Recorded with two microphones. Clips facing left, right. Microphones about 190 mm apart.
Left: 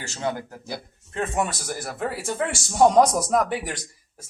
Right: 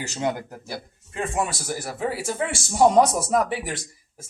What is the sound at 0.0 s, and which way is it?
Speech, 15° right (ahead or behind).